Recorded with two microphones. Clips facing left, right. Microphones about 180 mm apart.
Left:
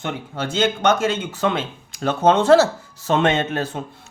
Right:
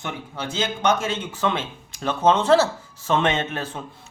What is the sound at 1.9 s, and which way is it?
Speech, 45° left (ahead or behind).